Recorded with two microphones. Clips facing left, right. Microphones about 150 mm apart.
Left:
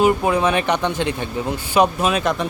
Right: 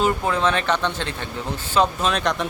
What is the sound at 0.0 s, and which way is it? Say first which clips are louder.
A man's voice: left 4 dB; 15° left (ahead or behind).